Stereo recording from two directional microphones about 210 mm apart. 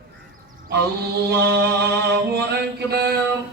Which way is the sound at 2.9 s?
50° right (ahead or behind).